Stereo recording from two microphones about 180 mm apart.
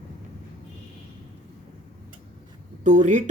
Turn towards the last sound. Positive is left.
turn(degrees=-45)  # may be behind; listen again after turning